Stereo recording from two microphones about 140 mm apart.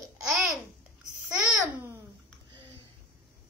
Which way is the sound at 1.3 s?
5° right (ahead or behind).